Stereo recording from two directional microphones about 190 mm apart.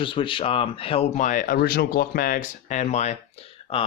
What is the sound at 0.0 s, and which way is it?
Speech, 25° left (ahead or behind).